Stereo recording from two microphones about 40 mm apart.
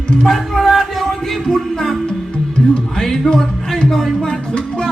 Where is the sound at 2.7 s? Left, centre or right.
Centre.